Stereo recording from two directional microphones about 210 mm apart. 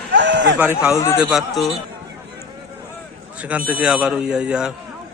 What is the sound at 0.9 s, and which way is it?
Speech, 15° left (ahead or behind).